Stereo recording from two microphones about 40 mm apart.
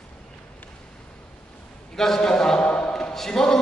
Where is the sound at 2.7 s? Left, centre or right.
Left.